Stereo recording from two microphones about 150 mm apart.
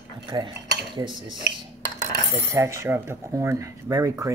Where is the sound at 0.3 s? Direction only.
35° right (ahead or behind).